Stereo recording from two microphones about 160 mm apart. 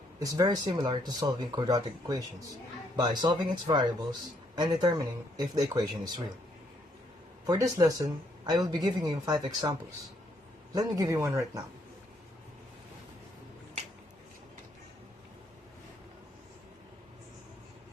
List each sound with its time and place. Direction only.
0.2 s speech: 20° right (ahead or behind)
7.4 s speech: 20° right (ahead or behind)
10.7 s speech: 20° right (ahead or behind)